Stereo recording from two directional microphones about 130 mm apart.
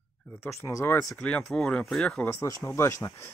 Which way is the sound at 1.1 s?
5° left (ahead or behind).